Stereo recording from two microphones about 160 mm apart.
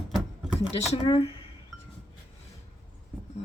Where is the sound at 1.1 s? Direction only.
40° left (ahead or behind).